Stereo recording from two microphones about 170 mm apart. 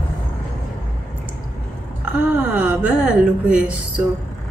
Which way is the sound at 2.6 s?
5° right (ahead or behind).